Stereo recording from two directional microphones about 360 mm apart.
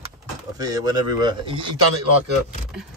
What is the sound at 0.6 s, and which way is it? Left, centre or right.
Speech, centre.